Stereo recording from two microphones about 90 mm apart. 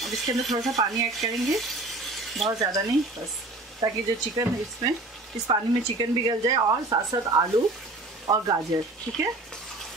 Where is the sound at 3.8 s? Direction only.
45° right (ahead or behind).